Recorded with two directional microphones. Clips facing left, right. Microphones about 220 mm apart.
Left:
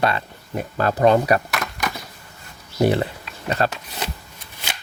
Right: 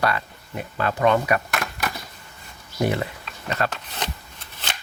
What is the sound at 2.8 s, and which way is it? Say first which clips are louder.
Speech: left 5 dB; 30° left (ahead or behind).